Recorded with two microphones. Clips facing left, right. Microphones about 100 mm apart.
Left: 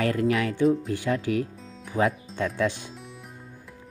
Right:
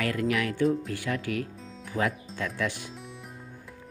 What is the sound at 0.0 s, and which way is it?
Speech, 30° left (ahead or behind).